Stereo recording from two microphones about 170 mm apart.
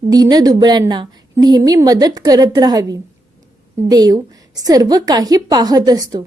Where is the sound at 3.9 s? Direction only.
20° right (ahead or behind).